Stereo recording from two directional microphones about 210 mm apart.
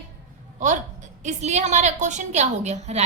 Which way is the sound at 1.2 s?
35° right (ahead or behind).